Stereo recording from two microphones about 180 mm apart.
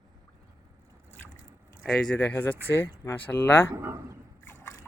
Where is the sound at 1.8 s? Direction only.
5° left (ahead or behind).